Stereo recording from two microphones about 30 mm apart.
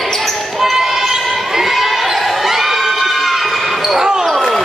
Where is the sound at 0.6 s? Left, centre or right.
Centre.